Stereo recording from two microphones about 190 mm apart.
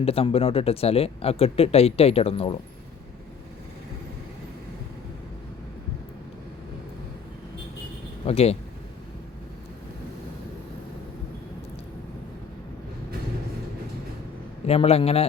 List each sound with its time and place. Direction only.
0.0 s speech: 30° left (ahead or behind)
8.2 s speech: 30° left (ahead or behind)
14.7 s speech: 30° left (ahead or behind)